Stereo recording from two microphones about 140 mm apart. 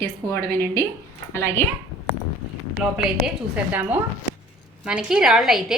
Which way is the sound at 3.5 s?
10° right (ahead or behind).